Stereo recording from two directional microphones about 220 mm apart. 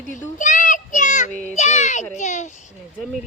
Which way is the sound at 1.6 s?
30° left (ahead or behind).